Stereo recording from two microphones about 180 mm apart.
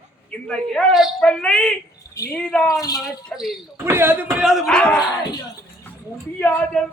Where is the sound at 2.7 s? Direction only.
20° left (ahead or behind).